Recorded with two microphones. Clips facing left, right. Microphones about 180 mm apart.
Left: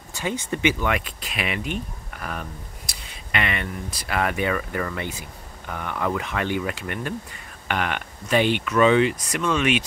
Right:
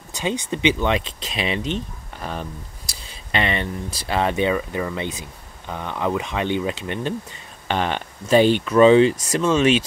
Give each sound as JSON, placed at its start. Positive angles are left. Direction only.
{"t": 0.1, "sound": "speech", "side_deg": -20}